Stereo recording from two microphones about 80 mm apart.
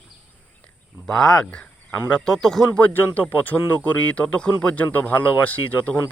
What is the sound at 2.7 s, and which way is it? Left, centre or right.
Speech, left.